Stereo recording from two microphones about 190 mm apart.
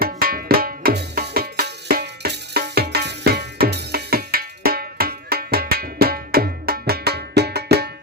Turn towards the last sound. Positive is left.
turn(degrees=-55)  # may be behind; listen again after turning